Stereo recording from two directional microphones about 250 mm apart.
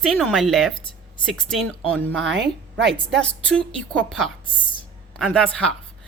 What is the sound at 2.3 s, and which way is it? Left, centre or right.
Speech, right.